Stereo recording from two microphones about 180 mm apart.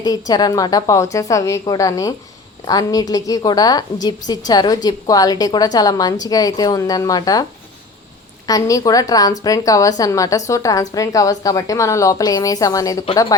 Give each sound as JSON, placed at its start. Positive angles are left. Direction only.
{"t": 0.0, "sound": "a woman's voice", "side_deg": 20}
{"t": 8.4, "sound": "a woman's voice", "side_deg": 20}